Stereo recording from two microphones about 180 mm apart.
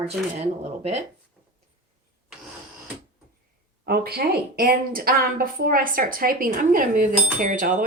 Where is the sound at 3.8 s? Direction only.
55° right (ahead or behind).